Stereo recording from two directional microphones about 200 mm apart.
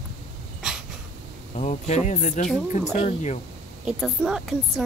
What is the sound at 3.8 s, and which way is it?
Speech, 5° right (ahead or behind).